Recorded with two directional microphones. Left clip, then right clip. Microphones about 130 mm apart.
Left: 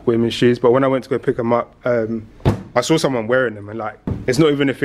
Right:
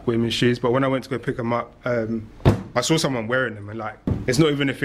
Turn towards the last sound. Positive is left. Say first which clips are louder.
# left 5 dB
turn(degrees=20)  # may be behind; listen again after turning